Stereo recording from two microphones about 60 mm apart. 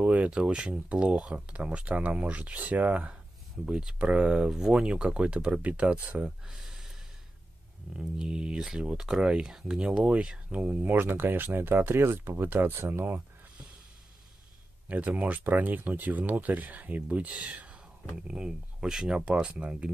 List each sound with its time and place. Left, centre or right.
0.0 s speech: right
6.4 s a sound: centre
8.0 s speech: centre
10.8 s speech: right
14.9 s speech: right